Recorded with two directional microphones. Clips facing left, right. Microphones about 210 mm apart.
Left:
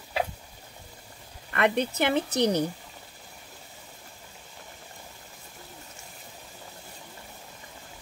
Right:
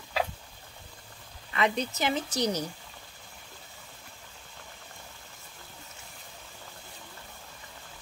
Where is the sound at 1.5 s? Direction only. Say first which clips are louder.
Left 4 dB; 60° left (ahead or behind).